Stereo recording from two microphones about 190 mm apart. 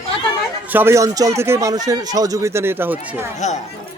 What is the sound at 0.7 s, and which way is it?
A man's voice, 10° right (ahead or behind).